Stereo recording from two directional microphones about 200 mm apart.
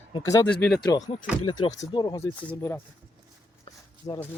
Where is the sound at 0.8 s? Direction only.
20° left (ahead or behind).